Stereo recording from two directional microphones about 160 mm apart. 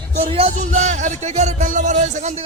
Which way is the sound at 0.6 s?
50° right (ahead or behind).